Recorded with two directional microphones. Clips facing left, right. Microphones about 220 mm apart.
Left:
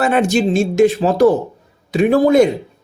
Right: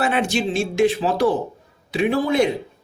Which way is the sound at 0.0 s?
45° left (ahead or behind).